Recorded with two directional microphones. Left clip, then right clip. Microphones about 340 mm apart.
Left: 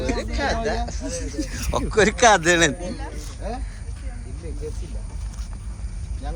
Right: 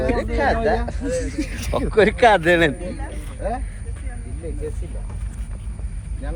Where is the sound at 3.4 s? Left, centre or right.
Centre.